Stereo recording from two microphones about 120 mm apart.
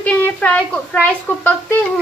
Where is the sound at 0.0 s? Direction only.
10° left (ahead or behind).